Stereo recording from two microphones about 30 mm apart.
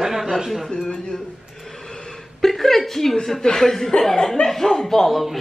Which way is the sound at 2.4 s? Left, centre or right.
Centre.